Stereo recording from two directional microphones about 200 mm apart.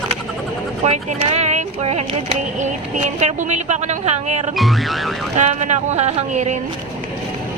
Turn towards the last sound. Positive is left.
turn(degrees=-35)  # may be behind; listen again after turning